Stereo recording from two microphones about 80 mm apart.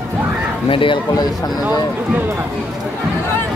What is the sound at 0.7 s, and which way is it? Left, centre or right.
Speech, left.